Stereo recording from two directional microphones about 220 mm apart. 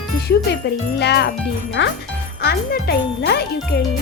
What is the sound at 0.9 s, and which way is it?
Speech, 50° left (ahead or behind).